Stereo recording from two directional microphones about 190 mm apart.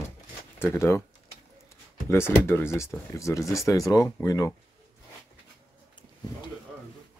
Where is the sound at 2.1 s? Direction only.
10° left (ahead or behind).